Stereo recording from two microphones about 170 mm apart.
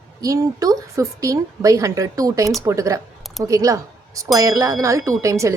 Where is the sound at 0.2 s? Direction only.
20° right (ahead or behind).